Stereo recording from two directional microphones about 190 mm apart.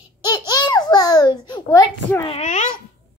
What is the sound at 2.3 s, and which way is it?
Speech, 35° left (ahead or behind).